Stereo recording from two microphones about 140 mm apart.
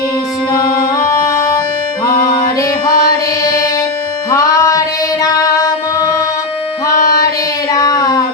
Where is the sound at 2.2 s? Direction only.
25° left (ahead or behind).